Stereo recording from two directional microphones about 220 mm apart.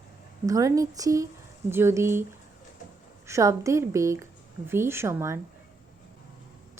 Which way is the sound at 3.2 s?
15° right (ahead or behind).